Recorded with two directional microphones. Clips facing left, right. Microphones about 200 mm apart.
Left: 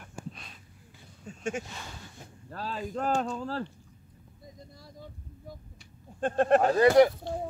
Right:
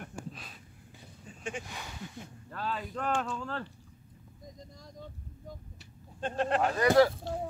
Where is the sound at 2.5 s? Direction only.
35° left (ahead or behind).